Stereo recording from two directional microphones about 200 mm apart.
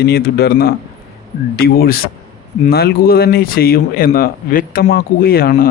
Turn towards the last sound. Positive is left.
turn(degrees=50)  # may be behind; listen again after turning